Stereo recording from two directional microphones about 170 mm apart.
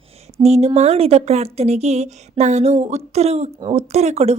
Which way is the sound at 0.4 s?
40° right (ahead or behind).